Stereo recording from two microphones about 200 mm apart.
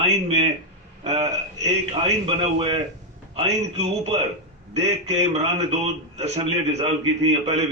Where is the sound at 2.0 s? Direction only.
25° right (ahead or behind).